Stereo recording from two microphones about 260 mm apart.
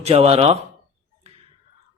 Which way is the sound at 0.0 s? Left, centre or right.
Right.